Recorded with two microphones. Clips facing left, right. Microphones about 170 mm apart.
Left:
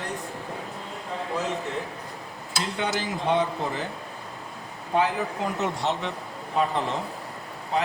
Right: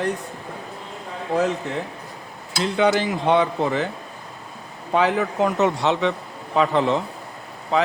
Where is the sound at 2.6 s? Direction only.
75° right (ahead or behind).